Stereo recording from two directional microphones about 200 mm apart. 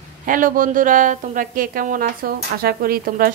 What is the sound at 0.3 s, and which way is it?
Frying, 40° right (ahead or behind).